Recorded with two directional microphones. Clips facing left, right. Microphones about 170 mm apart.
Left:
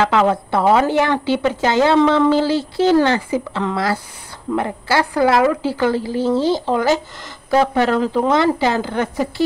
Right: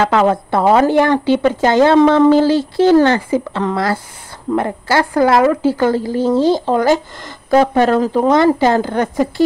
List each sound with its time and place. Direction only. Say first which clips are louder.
0.0 s speech: right 2 dB; 45° right (ahead or behind)